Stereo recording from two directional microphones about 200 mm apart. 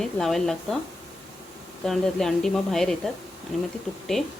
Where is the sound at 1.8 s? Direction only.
Centre (ahead or behind).